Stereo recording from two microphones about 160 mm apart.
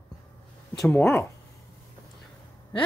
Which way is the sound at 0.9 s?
15° left (ahead or behind).